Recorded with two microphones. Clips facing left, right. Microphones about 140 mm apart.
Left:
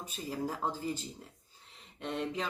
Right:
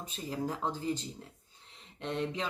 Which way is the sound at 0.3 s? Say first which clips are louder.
Right 1 dB; 5° left (ahead or behind).